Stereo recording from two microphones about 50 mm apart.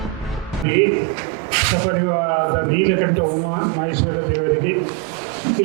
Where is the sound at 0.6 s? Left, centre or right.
Right.